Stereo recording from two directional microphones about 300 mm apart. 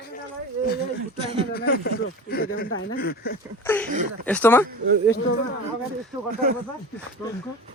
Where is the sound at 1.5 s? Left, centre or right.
Left.